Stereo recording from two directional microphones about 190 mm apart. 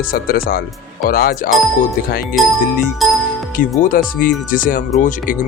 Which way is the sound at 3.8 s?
45° left (ahead or behind).